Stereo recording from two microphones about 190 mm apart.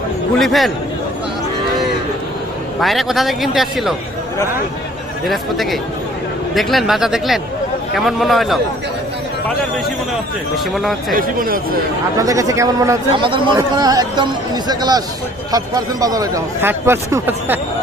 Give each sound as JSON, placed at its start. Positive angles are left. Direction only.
{"t": 0.3, "sound": "a man's voice", "side_deg": 0}
{"t": 2.8, "sound": "a man's voice", "side_deg": 0}
{"t": 5.2, "sound": "a man's voice", "side_deg": 0}
{"t": 11.1, "sound": "speech", "side_deg": -50}
{"t": 12.1, "sound": "a man's voice", "side_deg": -15}